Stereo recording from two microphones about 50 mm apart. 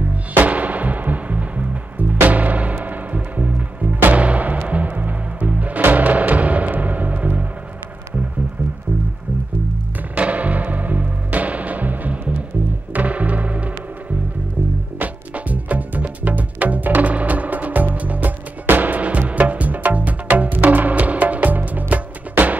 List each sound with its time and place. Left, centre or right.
0.1 s music: right
10.1 s music: right
15.0 s music: right